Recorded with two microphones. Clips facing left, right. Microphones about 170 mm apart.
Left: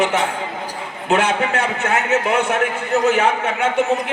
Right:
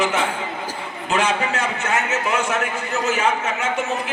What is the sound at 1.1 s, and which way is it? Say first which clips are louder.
A man's voice: left 3 dB; 60° left (ahead or behind).